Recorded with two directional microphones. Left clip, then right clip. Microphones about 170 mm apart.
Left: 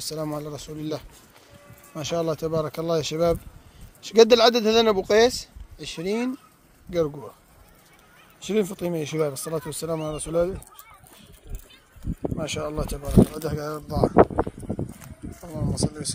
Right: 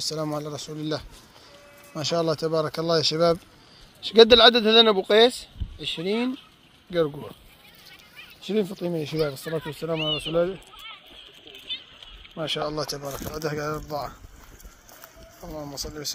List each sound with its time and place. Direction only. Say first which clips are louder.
0.0 s speech: right 2 dB; centre (ahead or behind)
8.5 s speech: left 2 dB; 15° left (ahead or behind)
12.4 s speech: right 4 dB; 5° left (ahead or behind)
15.4 s speech: left 4 dB; 5° left (ahead or behind)